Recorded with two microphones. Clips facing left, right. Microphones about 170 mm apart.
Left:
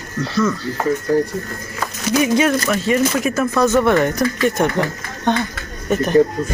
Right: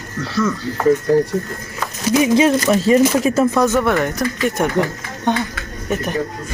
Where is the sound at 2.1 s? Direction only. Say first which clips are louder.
Right 2 dB; 25° right (ahead or behind).